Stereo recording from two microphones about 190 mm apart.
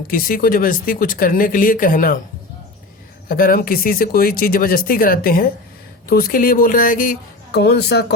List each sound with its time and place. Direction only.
0.1 s speech: 50° left (ahead or behind)
3.2 s speech: 50° left (ahead or behind)